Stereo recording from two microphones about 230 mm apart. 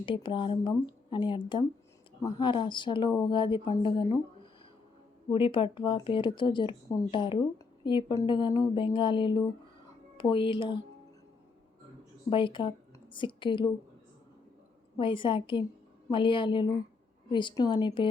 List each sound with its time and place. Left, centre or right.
0.0 s speech: left
5.3 s speech: left
12.3 s speech: left
14.9 s speech: left